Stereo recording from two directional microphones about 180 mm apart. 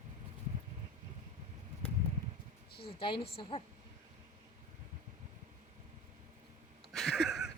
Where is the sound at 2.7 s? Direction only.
30° left (ahead or behind).